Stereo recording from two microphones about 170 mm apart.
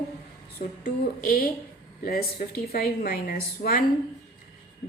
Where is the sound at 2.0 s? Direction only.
65° left (ahead or behind).